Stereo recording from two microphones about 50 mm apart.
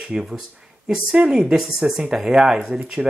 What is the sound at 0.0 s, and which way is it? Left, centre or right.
Speech, centre.